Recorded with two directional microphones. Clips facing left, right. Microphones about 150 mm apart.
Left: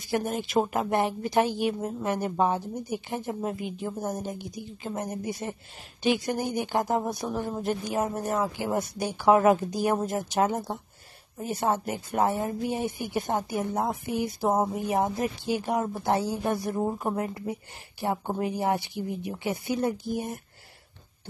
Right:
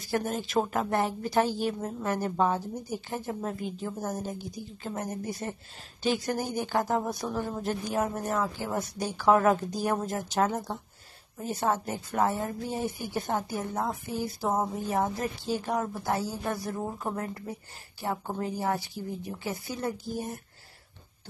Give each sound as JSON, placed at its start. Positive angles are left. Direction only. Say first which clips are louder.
{"t": 0.1, "sound": "speech", "louder": "left 2 dB", "side_deg": 15}